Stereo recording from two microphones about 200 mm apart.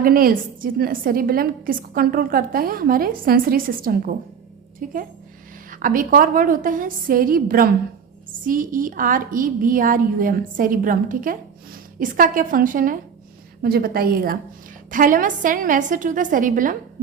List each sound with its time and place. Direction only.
0.0 s a woman's voice: 45° right (ahead or behind)